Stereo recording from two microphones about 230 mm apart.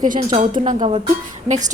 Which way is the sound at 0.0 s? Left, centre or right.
Right.